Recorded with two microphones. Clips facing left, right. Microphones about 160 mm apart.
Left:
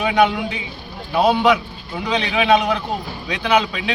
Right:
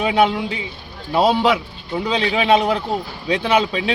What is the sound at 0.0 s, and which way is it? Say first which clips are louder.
A man's voice: even; 25° right (ahead or behind).